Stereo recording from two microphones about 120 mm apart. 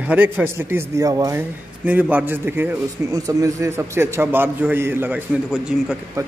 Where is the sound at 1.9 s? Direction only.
15° right (ahead or behind).